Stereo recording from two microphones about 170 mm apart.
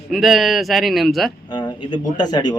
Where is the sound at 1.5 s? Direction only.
25° left (ahead or behind).